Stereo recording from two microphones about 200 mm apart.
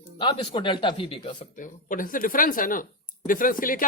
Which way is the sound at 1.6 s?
40° left (ahead or behind).